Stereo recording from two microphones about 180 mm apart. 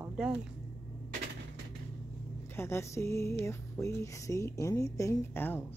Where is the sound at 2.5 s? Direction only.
15° left (ahead or behind).